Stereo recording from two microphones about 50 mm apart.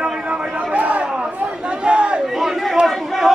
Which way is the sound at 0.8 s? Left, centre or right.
Right.